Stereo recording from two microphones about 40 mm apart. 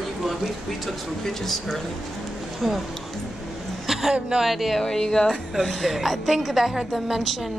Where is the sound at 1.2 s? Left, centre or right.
Centre.